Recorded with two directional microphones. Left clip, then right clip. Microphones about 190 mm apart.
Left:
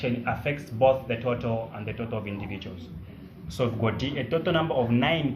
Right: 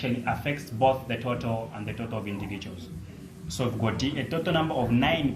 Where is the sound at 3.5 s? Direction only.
35° left (ahead or behind).